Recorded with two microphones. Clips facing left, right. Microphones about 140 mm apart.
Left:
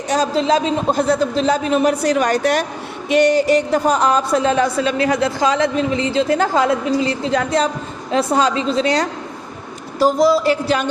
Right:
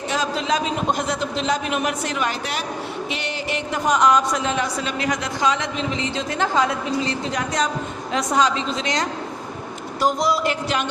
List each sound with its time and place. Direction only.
0.1 s a woman's voice: 35° left (ahead or behind)